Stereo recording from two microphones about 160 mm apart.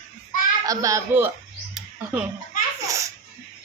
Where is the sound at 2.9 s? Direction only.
20° right (ahead or behind).